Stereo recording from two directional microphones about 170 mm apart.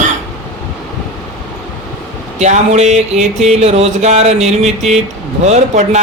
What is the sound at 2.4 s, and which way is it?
A man's voice, 45° right (ahead or behind).